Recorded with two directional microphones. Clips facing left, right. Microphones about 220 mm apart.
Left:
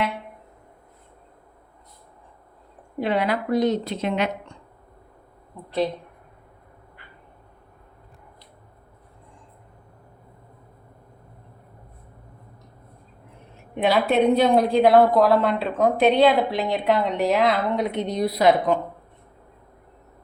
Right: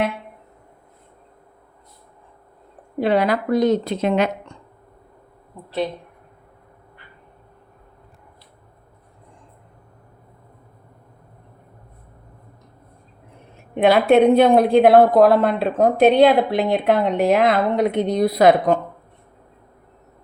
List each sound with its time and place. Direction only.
3.0 s a woman's voice: 40° right (ahead or behind)
13.7 s a woman's voice: 60° right (ahead or behind)